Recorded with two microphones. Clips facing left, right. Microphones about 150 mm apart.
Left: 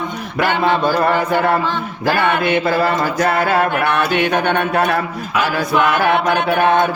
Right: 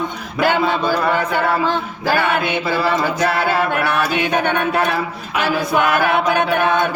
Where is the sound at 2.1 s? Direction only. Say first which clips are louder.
Left 2 dB; 50° left (ahead or behind).